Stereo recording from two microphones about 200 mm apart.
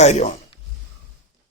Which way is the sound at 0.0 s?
35° left (ahead or behind).